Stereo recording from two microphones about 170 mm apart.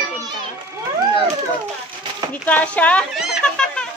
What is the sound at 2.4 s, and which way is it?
Speech, 10° left (ahead or behind).